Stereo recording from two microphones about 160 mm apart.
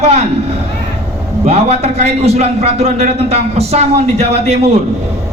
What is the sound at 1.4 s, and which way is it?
A man's voice, 45° right (ahead or behind).